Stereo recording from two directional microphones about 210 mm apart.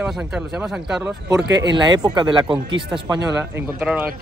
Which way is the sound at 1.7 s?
20° right (ahead or behind).